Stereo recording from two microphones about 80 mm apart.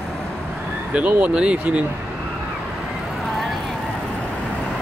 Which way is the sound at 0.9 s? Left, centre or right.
Centre.